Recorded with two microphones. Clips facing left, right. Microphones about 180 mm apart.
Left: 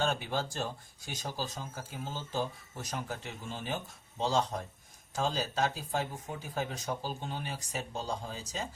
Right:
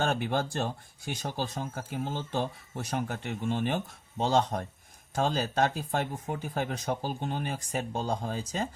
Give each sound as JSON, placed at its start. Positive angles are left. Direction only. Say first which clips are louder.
{"t": 0.0, "sound": "speech", "louder": "right 4 dB", "side_deg": -55}